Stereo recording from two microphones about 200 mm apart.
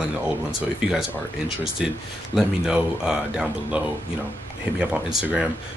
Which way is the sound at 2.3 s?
5° right (ahead or behind).